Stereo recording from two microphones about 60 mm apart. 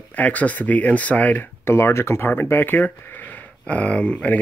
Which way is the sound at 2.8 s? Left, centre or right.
Left.